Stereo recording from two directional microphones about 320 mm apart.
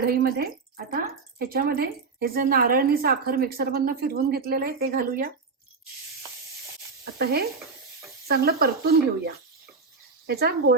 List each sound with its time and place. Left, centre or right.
0.2 s a woman's voice: right
7.0 s a woman's voice: right